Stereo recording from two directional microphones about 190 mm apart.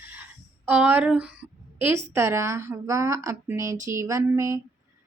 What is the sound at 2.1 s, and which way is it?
A woman's voice, 15° right (ahead or behind).